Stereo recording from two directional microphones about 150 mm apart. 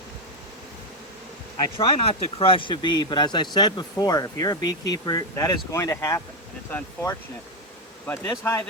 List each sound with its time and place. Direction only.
1.5 s speech: 30° left (ahead or behind)
8.0 s speech: 15° left (ahead or behind)